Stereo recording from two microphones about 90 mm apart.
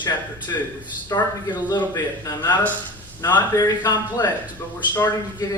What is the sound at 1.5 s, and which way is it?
A man's voice, 55° left (ahead or behind).